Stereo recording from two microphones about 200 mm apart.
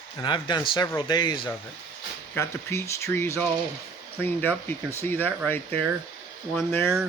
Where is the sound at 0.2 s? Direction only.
20° left (ahead or behind).